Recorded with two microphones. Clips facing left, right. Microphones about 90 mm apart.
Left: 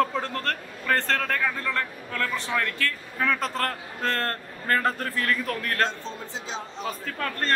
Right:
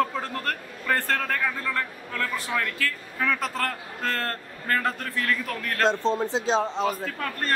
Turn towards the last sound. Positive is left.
turn(degrees=-10)  # may be behind; listen again after turning